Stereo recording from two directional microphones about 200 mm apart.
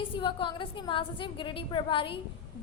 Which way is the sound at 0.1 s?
25° left (ahead or behind).